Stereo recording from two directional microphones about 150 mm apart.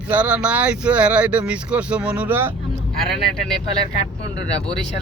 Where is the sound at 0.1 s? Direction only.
10° right (ahead or behind).